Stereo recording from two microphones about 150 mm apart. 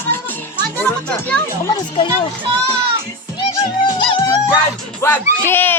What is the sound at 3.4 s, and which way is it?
Music, 35° left (ahead or behind).